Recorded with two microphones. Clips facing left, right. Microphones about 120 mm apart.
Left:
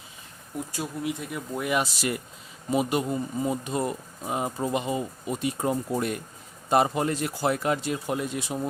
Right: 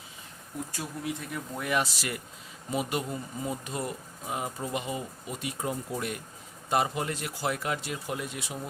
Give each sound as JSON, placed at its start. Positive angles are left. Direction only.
{"t": 0.8, "sound": "speech", "side_deg": 15}